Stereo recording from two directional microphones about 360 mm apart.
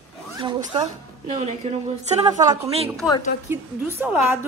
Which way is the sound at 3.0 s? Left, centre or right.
Centre.